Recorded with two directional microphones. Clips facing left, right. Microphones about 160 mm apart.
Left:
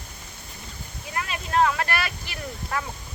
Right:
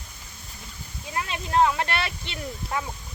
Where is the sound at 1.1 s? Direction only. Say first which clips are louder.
Right 1 dB; 20° right (ahead or behind).